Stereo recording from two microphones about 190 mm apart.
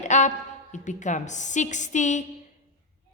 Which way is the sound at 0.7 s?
40° left (ahead or behind).